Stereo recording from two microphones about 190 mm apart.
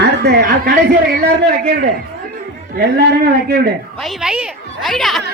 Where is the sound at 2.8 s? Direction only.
55° right (ahead or behind).